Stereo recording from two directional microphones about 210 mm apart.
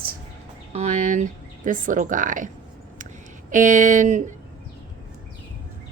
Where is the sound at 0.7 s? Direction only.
35° right (ahead or behind).